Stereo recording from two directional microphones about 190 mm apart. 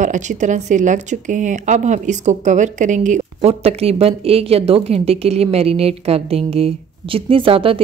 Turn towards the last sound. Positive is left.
turn(degrees=-30)  # may be behind; listen again after turning